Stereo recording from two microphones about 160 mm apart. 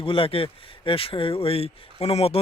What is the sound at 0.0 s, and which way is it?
Speech, 35° left (ahead or behind).